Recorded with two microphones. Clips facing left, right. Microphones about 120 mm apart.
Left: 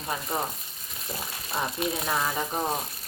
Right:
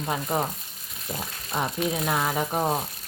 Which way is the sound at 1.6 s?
15° right (ahead or behind).